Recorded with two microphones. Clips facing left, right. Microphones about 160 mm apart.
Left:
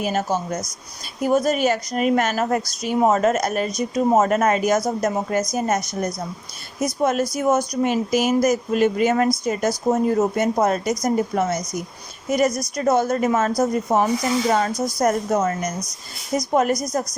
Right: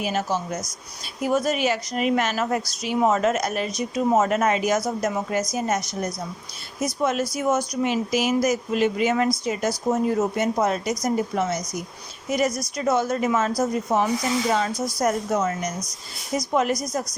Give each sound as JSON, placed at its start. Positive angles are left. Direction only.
{"t": 0.0, "sound": "a woman's voice", "side_deg": 45}